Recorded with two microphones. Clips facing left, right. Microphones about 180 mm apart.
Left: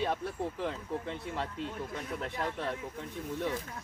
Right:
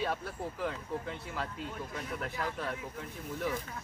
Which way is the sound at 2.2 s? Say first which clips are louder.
Left 1 dB; 25° left (ahead or behind).